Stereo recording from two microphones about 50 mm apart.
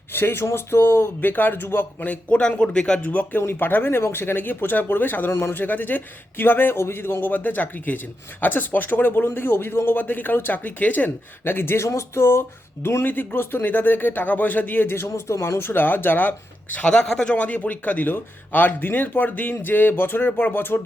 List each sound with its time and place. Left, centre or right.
0.1 s a sound: left
0.4 s a man's voice: left
2.6 s speech: centre
3.1 s speech: left
3.6 s a man's voice: left
5.3 s speech: left
5.5 s a man's voice: left
13.1 s a man's voice: left
16.8 s speech: left
17.3 s a man's voice: left